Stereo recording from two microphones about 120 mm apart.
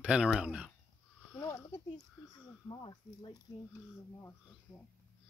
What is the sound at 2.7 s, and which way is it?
Speech, 40° left (ahead or behind).